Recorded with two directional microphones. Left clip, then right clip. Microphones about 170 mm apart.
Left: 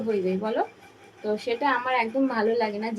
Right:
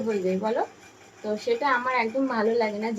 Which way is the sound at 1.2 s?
5° left (ahead or behind).